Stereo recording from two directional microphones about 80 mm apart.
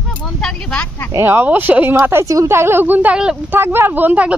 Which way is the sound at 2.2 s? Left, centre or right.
Right.